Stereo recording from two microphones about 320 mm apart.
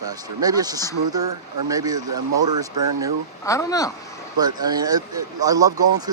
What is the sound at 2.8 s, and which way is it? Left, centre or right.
Speech, right.